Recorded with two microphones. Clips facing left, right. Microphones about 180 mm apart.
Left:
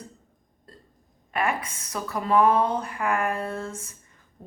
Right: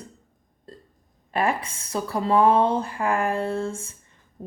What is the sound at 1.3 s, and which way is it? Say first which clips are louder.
Speech: right 3 dB; 30° right (ahead or behind).